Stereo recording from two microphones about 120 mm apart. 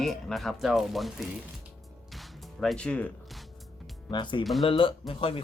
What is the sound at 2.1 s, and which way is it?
Music, centre (ahead or behind).